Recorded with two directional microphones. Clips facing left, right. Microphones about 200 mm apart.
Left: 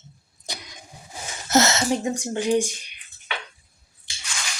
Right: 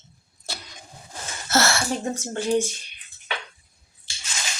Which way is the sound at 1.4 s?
20° left (ahead or behind).